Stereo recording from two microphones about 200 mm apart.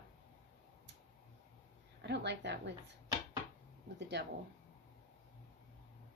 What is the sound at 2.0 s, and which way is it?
Speech, 55° right (ahead or behind).